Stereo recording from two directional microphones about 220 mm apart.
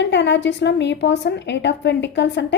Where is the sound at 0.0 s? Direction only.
55° left (ahead or behind).